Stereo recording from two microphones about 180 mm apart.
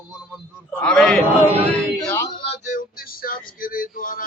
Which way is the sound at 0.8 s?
5° left (ahead or behind).